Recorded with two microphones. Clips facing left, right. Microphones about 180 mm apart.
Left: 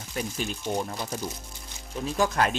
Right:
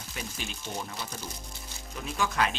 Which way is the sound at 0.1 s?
45° left (ahead or behind).